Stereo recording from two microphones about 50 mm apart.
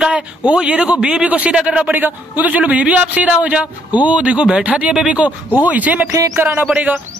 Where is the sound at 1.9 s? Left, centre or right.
Right.